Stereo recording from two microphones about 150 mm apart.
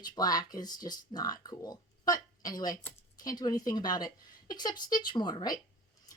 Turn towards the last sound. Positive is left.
turn(degrees=25)  # may be behind; listen again after turning